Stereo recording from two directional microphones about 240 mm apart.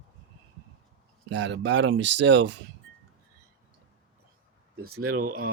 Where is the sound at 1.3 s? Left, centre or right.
Right.